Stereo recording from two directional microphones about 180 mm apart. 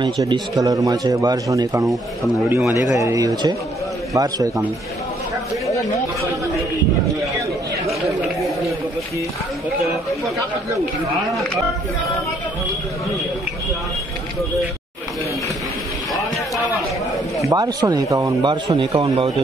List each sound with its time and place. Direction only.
0.0 s a man's voice: 20° right (ahead or behind)
17.5 s speech: 20° right (ahead or behind)